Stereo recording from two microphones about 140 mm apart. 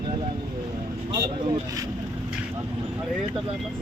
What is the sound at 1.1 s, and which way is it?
Speech, 25° right (ahead or behind).